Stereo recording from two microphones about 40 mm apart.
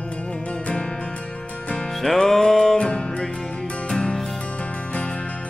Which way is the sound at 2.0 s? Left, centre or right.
Centre.